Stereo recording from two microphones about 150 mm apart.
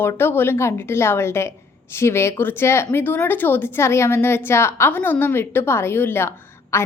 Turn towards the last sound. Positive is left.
turn(degrees=15)  # may be behind; listen again after turning